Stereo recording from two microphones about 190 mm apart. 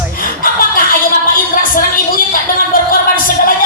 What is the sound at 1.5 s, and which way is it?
Music, 50° left (ahead or behind).